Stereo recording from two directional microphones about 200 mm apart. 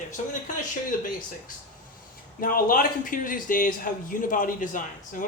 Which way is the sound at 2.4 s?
45° left (ahead or behind).